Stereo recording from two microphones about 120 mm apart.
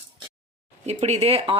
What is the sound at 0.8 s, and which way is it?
Speech, 65° right (ahead or behind).